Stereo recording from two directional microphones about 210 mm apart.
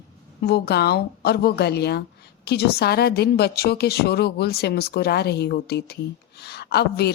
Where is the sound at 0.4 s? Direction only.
50° left (ahead or behind).